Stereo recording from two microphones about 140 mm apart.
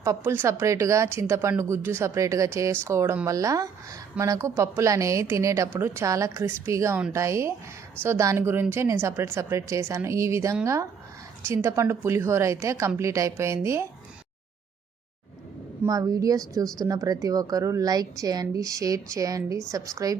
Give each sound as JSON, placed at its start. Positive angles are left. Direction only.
{"t": 0.0, "sound": "speech", "side_deg": -20}
{"t": 15.8, "sound": "speech", "side_deg": -25}